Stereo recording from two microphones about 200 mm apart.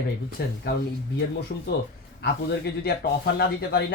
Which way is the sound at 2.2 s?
55° left (ahead or behind).